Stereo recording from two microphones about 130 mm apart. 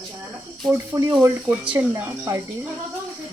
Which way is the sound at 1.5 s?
10° right (ahead or behind).